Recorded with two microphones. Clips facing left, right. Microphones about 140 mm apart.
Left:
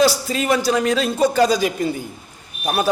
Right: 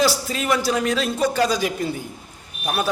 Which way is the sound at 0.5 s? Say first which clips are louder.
Left 3 dB; 5° right (ahead or behind).